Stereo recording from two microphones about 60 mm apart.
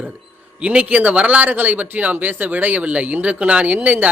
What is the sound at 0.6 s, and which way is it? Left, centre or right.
A man's voice, centre.